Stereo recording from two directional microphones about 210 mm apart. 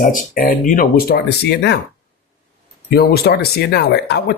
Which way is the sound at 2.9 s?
50° left (ahead or behind).